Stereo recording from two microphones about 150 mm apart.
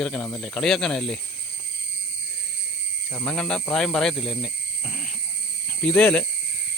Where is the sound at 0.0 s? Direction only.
5° left (ahead or behind).